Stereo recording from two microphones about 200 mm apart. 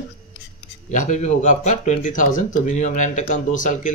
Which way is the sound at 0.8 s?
35° left (ahead or behind).